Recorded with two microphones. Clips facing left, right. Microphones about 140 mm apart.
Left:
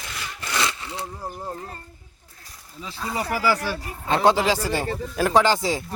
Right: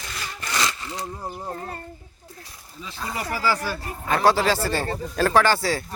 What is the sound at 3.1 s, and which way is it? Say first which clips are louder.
Speech: left 2 dB; 15° left (ahead or behind).